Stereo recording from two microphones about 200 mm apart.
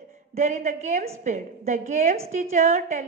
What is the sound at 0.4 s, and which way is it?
A woman's voice, 35° right (ahead or behind).